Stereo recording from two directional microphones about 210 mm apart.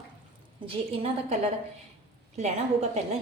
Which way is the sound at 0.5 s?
25° right (ahead or behind).